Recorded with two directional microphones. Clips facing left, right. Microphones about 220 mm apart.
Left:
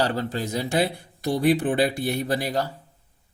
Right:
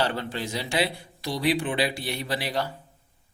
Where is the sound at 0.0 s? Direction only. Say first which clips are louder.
Left 3 dB; 40° left (ahead or behind).